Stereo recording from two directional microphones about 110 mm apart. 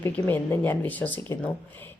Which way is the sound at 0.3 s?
15° left (ahead or behind).